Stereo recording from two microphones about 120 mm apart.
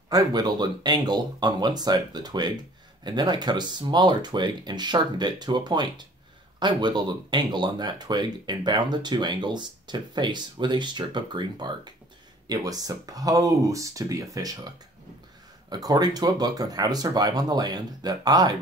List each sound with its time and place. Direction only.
0.1 s speech: 35° right (ahead or behind)
15.7 s speech: 35° right (ahead or behind)